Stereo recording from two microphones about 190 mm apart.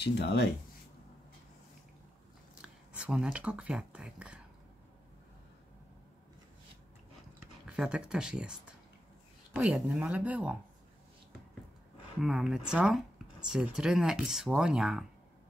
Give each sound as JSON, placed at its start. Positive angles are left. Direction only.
{"t": 0.0, "sound": "speech", "side_deg": 60}
{"t": 2.6, "sound": "speech", "side_deg": -5}
{"t": 7.7, "sound": "speech", "side_deg": -5}
{"t": 12.2, "sound": "speech", "side_deg": 0}